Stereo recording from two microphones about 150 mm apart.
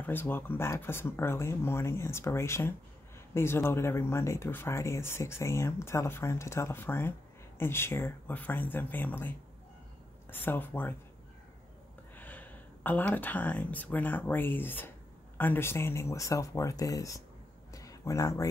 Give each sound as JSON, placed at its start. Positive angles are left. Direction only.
{"t": 0.0, "sound": "speech", "side_deg": 15}
{"t": 10.3, "sound": "speech", "side_deg": 15}
{"t": 12.2, "sound": "speech", "side_deg": 10}
{"t": 17.7, "sound": "a sound", "side_deg": 20}